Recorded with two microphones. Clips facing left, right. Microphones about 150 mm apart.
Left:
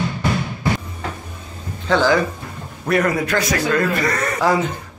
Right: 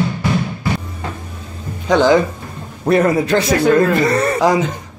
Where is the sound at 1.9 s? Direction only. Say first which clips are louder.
Right 4 dB; 20° right (ahead or behind).